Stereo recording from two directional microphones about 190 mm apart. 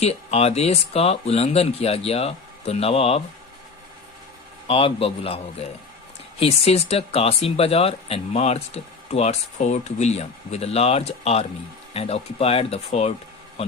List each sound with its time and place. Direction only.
0.0 s speech: 35° left (ahead or behind)
4.7 s a man's voice: 30° left (ahead or behind)